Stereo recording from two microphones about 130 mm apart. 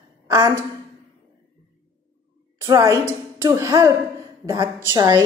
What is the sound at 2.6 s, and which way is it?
A woman's voice, 25° right (ahead or behind).